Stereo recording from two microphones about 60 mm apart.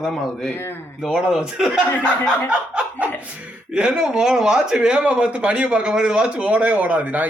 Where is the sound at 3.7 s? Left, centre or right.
Centre.